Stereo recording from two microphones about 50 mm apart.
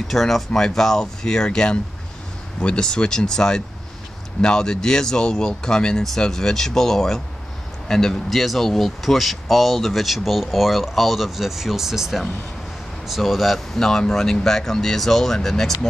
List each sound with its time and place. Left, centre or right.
0.1 s speech: centre